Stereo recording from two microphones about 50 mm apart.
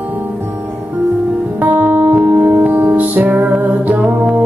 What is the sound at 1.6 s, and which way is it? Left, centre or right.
Music, right.